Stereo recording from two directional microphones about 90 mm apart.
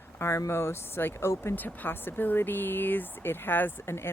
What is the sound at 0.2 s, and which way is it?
Speech, 30° left (ahead or behind).